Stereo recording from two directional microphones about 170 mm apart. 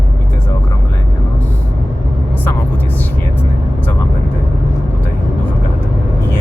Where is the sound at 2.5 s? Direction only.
10° left (ahead or behind).